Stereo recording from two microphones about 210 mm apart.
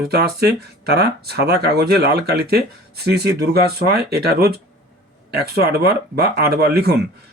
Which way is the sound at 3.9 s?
50° right (ahead or behind).